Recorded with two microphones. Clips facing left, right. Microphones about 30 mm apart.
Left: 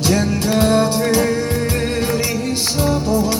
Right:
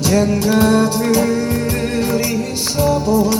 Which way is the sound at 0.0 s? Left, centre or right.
Left.